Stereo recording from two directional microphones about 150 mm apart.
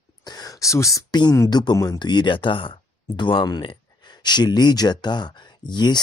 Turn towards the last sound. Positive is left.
turn(degrees=30)  # may be behind; listen again after turning